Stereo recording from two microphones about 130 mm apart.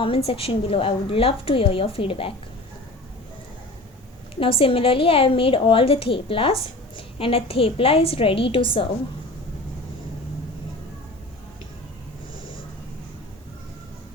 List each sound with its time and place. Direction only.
0.0 s a woman's voice: 45° left (ahead or behind)
4.4 s a woman's voice: 45° left (ahead or behind)